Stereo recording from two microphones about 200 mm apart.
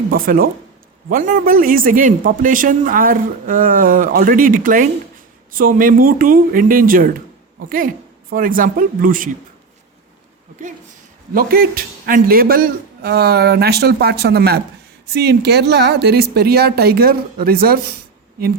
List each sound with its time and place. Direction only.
0.1 s speech: 45° right (ahead or behind)
11.3 s speech: 45° right (ahead or behind)